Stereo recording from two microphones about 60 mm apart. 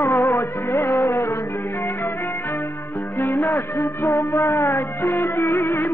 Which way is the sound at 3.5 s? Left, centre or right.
Left.